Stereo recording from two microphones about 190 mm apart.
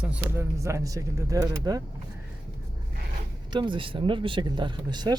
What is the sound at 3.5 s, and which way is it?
Speech, 25° right (ahead or behind).